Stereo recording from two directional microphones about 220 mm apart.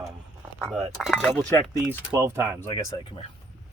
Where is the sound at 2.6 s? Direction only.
15° left (ahead or behind).